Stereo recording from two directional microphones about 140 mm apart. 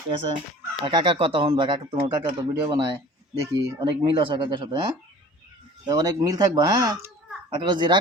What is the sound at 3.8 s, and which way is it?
Speech, 40° right (ahead or behind).